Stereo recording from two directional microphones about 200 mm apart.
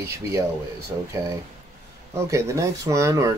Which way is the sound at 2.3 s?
15° right (ahead or behind).